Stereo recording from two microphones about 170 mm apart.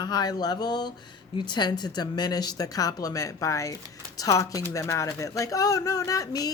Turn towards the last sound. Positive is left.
turn(degrees=20)  # may be behind; listen again after turning